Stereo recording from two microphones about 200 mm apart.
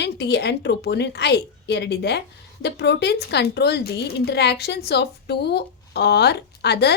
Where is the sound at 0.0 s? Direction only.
55° left (ahead or behind).